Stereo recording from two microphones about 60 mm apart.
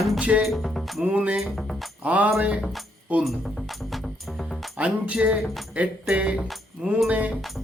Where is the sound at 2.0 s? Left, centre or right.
Right.